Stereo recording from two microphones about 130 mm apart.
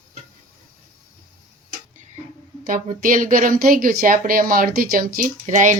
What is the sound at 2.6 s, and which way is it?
Speech, 90° right.